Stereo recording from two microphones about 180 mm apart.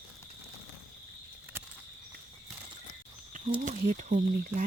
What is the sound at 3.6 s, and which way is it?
Speech, 45° right (ahead or behind).